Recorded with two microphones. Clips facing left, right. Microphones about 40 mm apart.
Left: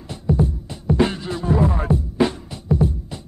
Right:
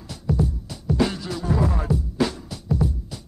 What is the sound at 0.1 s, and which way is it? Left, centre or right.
Music, left.